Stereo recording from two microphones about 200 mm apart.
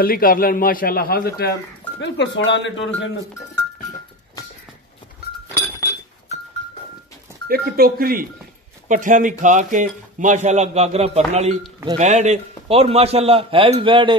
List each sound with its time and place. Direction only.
0.0 s a man's voice: 45° left (ahead or behind)
2.0 s speech: 60° left (ahead or behind)
7.4 s a man's voice: 50° right (ahead or behind); by 14.1 s 25° right (ahead or behind)